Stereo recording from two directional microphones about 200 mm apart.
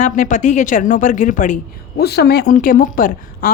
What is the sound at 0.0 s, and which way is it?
Speech, 40° left (ahead or behind).